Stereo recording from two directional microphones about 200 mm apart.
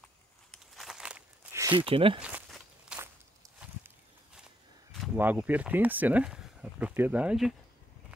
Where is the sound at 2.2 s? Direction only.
5° right (ahead or behind).